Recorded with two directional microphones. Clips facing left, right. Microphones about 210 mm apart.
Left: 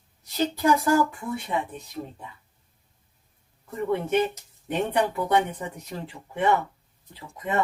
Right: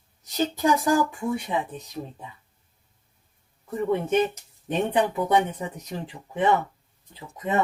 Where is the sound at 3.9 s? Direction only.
15° right (ahead or behind).